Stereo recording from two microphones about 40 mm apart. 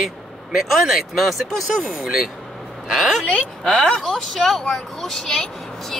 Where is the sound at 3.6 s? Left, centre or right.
Left.